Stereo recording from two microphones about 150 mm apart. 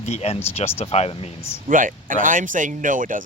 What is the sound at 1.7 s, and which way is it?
Speech, 65° right (ahead or behind).